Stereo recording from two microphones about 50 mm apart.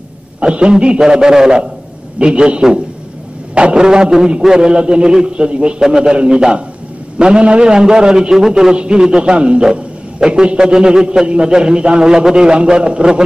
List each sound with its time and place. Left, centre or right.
0.4 s a man's voice: centre